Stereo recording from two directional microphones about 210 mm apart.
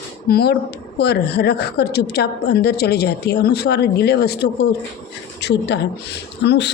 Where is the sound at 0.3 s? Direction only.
45° left (ahead or behind).